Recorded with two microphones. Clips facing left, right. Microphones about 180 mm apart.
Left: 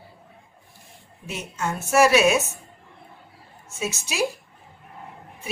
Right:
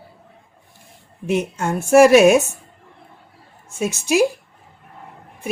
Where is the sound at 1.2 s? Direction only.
60° right (ahead or behind).